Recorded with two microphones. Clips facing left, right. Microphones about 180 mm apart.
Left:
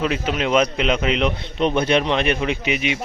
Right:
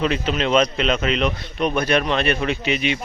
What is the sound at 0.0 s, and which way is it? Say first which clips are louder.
Speech: even; 10° left (ahead or behind).